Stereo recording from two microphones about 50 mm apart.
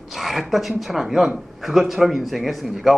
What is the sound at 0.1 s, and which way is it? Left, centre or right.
Speech, centre.